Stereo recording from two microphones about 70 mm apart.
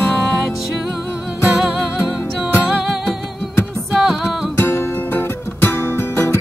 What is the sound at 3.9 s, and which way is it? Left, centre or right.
Music, centre.